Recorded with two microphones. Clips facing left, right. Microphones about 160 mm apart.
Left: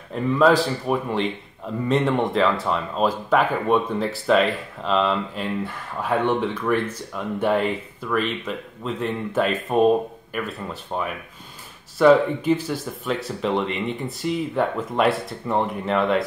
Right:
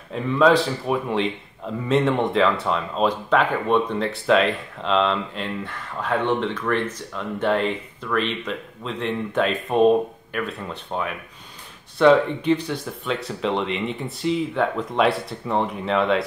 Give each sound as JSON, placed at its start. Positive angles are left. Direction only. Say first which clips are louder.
{"t": 0.1, "sound": "speech", "louder": "even", "side_deg": 0}